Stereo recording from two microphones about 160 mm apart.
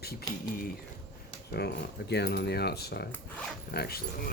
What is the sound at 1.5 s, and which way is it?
Speech, 90° left.